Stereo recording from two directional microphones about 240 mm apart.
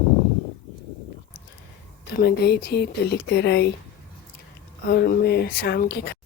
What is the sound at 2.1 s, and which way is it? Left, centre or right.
Speech, left.